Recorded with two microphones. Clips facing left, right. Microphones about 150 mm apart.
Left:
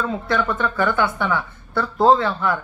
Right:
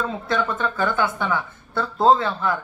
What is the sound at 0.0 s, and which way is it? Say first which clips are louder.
A woman's voice: left 2 dB; 25° right (ahead or behind).